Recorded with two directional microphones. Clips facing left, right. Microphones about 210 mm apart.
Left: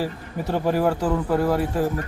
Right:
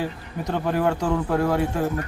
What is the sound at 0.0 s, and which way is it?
Speech, 5° left (ahead or behind).